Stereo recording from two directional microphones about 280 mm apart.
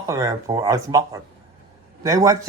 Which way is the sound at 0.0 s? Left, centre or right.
Centre.